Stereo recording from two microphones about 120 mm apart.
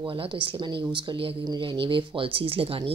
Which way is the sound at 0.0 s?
45° right (ahead or behind).